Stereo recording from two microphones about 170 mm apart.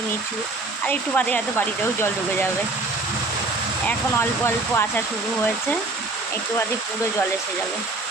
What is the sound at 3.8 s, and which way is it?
A woman's voice, 15° left (ahead or behind).